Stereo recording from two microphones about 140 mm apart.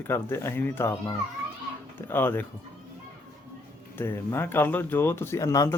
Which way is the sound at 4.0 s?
15° left (ahead or behind).